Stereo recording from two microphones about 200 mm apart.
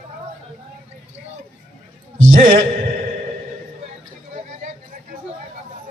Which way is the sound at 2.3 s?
45° right (ahead or behind).